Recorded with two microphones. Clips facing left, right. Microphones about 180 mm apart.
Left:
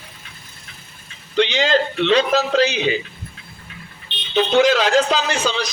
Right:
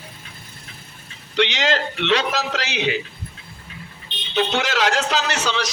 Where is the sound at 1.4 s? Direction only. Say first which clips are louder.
Left 3 dB; 75° right (ahead or behind).